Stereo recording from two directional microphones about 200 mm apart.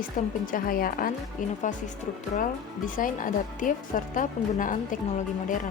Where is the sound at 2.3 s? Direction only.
40° left (ahead or behind).